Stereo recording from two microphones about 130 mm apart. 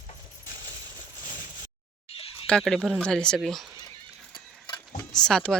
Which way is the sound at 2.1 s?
45° left (ahead or behind).